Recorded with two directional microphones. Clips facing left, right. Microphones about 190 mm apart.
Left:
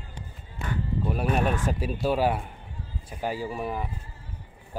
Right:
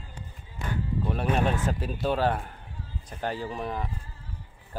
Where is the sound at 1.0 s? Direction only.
10° left (ahead or behind).